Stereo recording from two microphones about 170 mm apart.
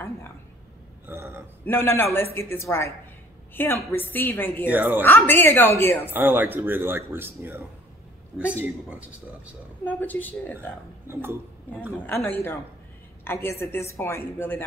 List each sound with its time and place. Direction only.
1.0 s a sound: 15° right (ahead or behind)
1.6 s a woman's voice: 15° left (ahead or behind)
4.6 s speech: 10° right (ahead or behind)
5.0 s a woman's voice: 10° left (ahead or behind)
6.0 s speech: 10° right (ahead or behind)
8.8 s speech: 5° right (ahead or behind)
9.8 s a woman's voice: 10° left (ahead or behind)
11.1 s speech: 15° right (ahead or behind)
12.1 s a woman's voice: 15° left (ahead or behind)